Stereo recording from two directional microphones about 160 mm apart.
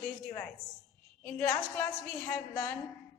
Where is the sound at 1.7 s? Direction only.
15° left (ahead or behind).